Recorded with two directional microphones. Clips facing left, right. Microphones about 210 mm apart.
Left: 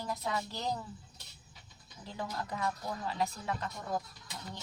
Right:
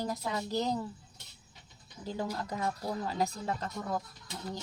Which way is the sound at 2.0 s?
35° right (ahead or behind).